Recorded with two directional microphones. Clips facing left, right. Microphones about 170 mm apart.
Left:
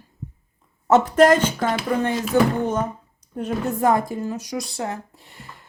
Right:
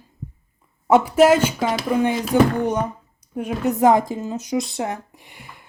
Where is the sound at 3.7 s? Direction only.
20° right (ahead or behind).